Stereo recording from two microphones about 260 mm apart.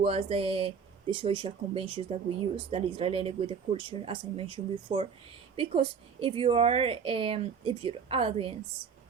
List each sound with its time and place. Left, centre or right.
0.0 s a woman's voice: right